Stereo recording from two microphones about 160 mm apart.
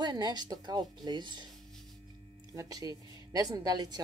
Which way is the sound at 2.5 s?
25° right (ahead or behind).